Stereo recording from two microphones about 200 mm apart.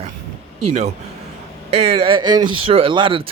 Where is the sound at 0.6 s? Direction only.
30° right (ahead or behind).